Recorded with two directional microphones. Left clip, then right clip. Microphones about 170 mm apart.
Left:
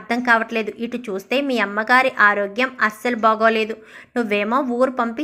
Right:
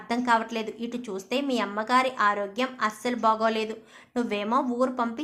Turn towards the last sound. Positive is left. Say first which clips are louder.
# left 7 dB
turn(degrees=15)  # may be behind; listen again after turning